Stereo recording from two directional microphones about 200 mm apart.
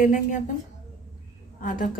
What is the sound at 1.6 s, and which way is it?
Speech, 40° left (ahead or behind).